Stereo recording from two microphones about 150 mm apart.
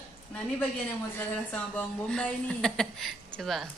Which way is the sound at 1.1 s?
10° left (ahead or behind).